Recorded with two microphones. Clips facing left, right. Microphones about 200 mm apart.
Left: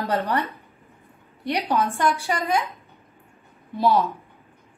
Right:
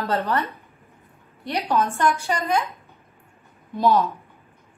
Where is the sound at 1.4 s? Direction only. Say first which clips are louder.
Even; 15° left (ahead or behind).